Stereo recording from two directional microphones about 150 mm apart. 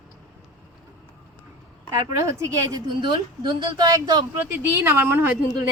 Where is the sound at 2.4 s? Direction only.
25° right (ahead or behind).